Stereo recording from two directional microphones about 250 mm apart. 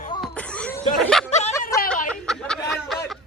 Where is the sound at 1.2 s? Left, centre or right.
Left.